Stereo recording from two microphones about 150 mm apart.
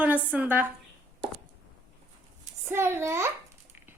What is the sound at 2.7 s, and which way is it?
Speech, 15° right (ahead or behind).